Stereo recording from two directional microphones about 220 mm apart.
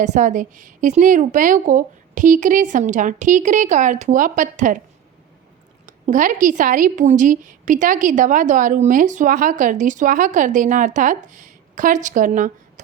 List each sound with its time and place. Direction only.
0.0 s a woman's voice: 35° right (ahead or behind)
5.8 s a woman's voice: 35° right (ahead or behind)